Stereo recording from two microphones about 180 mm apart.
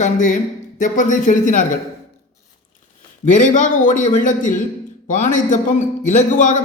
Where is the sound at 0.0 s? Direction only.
45° left (ahead or behind).